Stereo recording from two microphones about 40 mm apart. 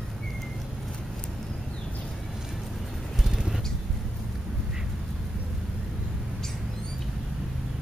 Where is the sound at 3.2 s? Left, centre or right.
Centre.